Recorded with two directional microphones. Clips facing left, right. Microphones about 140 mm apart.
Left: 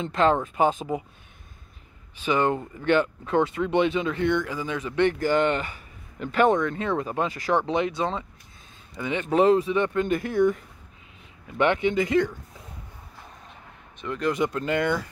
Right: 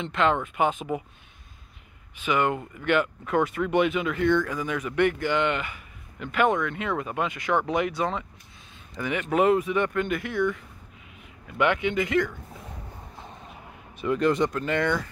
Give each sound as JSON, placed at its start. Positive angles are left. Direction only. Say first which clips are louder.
{"t": 0.0, "sound": "speech", "louder": "left 2 dB", "side_deg": 35}
{"t": 2.1, "sound": "speech", "louder": "left 2 dB", "side_deg": 30}
{"t": 14.0, "sound": "speech", "louder": "right 3 dB", "side_deg": -5}
{"t": 14.5, "sound": "speech", "louder": "left 1 dB", "side_deg": 25}